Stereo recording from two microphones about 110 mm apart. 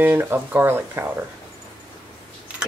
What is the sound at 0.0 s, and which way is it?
Speech, 20° right (ahead or behind).